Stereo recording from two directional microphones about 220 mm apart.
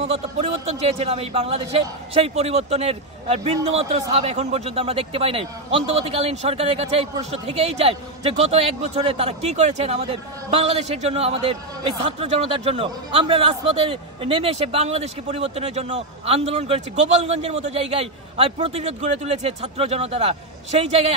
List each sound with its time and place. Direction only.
0.0 s a man's voice: 30° right (ahead or behind)